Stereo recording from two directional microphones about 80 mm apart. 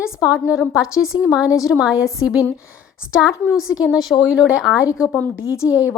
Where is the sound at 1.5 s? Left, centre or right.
Left.